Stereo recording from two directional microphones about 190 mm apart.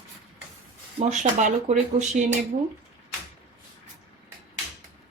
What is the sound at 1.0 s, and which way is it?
Speech, 40° right (ahead or behind).